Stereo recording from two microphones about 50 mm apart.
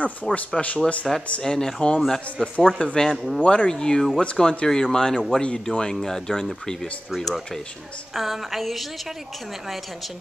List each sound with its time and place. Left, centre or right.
0.0 s speech: left
1.4 s speech: centre
8.1 s a sound: centre